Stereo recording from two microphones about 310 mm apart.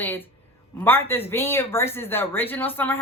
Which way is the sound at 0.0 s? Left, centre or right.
Centre.